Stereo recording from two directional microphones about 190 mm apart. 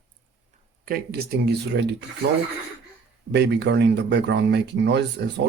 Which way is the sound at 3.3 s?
65° right (ahead or behind).